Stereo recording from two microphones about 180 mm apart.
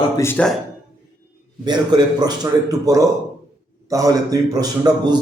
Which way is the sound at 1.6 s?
25° right (ahead or behind).